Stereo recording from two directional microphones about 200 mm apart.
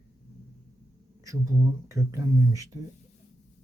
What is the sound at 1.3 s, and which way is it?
Speech, 15° right (ahead or behind).